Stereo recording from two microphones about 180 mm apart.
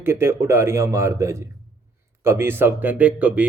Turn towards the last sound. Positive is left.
turn(degrees=-10)  # may be behind; listen again after turning